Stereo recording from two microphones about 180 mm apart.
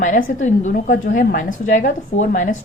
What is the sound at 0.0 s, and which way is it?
A woman's voice, 45° left (ahead or behind).